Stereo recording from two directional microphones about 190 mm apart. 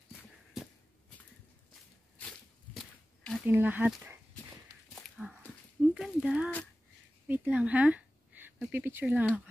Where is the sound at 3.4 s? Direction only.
10° right (ahead or behind).